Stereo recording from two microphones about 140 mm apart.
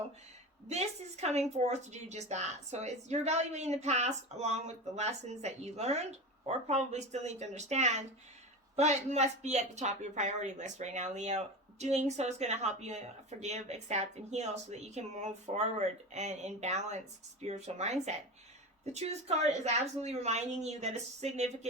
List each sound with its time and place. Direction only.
0.7 s a woman's voice: 50° right (ahead or behind)